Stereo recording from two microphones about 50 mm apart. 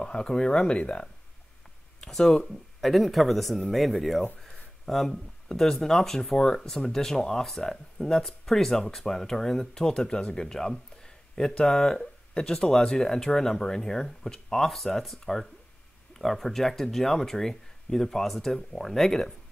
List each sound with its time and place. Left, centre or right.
0.0 s speech: centre